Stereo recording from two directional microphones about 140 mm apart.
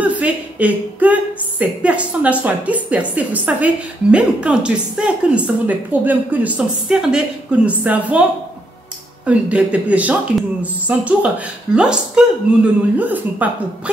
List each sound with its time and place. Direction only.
0.0 s a woman's voice: 10° right (ahead or behind)
9.2 s a woman's voice: 10° right (ahead or behind)